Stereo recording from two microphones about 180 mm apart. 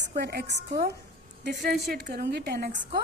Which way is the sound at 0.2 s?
65° right (ahead or behind).